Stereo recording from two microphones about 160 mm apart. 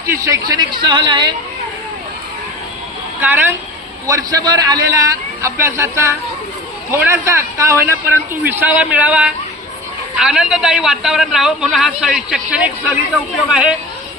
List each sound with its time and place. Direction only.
0.3 s a woman's voice: 25° right (ahead or behind)
3.2 s a woman's voice: 10° right (ahead or behind)